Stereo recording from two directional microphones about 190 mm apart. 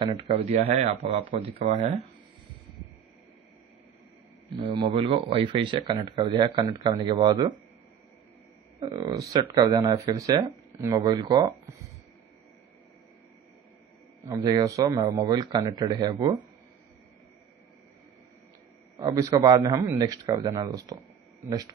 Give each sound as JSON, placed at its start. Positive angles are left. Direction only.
{"t": 0.0, "sound": "speech", "side_deg": -25}
{"t": 4.9, "sound": "speech", "side_deg": -30}
{"t": 8.7, "sound": "speech", "side_deg": -20}
{"t": 14.3, "sound": "speech", "side_deg": -25}
{"t": 18.9, "sound": "speech", "side_deg": -20}